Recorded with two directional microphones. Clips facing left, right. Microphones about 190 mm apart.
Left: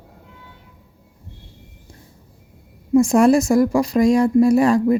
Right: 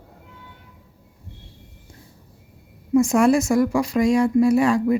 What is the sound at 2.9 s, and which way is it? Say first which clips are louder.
A woman's voice: left 3 dB; 35° left (ahead or behind).